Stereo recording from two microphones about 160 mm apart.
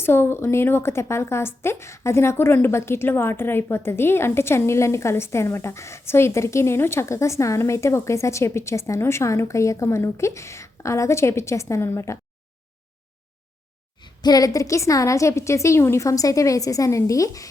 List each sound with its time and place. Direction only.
0.0 s a woman's voice: 15° left (ahead or behind)
14.0 s a woman's voice: 25° left (ahead or behind)